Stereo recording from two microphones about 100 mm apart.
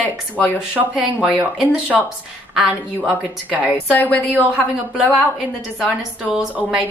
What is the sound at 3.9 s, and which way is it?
Speech, 15° left (ahead or behind).